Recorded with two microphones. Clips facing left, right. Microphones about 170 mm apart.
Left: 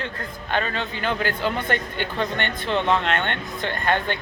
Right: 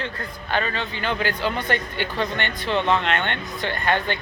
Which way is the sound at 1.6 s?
50° left (ahead or behind).